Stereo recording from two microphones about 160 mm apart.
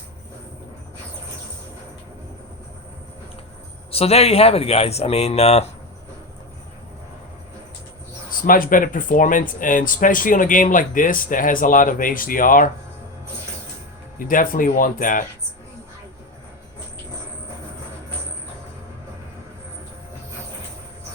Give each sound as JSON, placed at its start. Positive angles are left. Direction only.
{"t": 3.9, "sound": "speech", "side_deg": 40}
{"t": 8.3, "sound": "speech", "side_deg": 60}
{"t": 14.3, "sound": "speech", "side_deg": 60}